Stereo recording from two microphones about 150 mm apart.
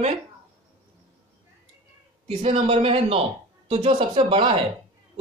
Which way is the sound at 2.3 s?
40° right (ahead or behind).